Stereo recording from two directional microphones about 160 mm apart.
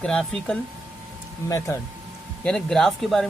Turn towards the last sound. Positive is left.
turn(degrees=0)  # may be behind; listen again after turning